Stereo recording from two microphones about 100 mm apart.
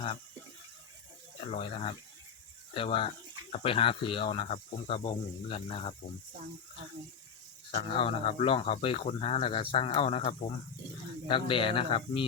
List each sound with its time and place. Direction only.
1.5 s speech: 90° left
2.7 s speech: 70° left (ahead or behind)
7.8 s speech: 80° left
11.3 s speech: 60° left (ahead or behind)